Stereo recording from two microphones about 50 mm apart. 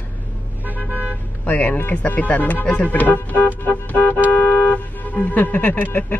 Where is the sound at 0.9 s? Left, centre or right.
Left.